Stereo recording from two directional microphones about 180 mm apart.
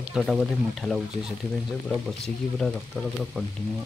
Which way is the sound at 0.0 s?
5° right (ahead or behind).